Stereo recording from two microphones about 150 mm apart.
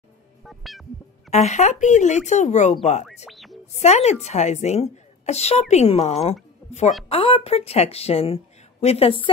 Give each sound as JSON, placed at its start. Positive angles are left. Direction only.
{"t": 0.5, "sound": "music", "side_deg": 0}
{"t": 1.3, "sound": "a woman's voice", "side_deg": 50}
{"t": 3.3, "sound": "a sound", "side_deg": 0}
{"t": 3.7, "sound": "a woman's voice", "side_deg": 45}
{"t": 6.6, "sound": "a sound", "side_deg": 0}
{"t": 7.1, "sound": "a woman's voice", "side_deg": 40}